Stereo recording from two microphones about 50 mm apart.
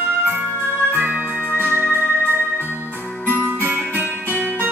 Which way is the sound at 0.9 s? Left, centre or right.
Right.